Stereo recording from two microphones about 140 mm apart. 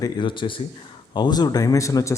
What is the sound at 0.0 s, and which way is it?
A man's voice, 35° left (ahead or behind).